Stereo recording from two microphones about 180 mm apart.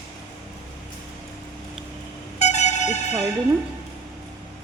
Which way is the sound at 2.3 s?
40° left (ahead or behind).